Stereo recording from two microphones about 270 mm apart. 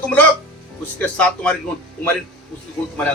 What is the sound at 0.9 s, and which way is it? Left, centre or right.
Speech, centre.